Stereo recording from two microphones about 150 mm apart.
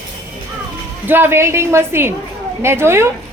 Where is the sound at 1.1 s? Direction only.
15° right (ahead or behind).